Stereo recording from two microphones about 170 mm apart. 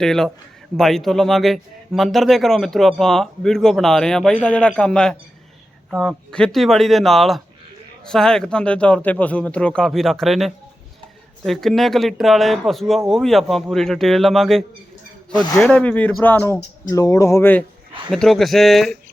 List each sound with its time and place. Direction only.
0.0 s speech: 5° left (ahead or behind)
18.1 s speech: centre (ahead or behind)